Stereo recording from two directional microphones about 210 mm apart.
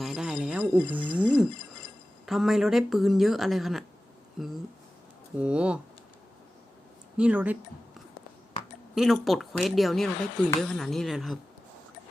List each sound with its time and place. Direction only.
0.0 s a sound: centre (ahead or behind)
2.2 s speech: centre (ahead or behind)
7.2 s speech: 5° right (ahead or behind)
9.0 s speech: centre (ahead or behind)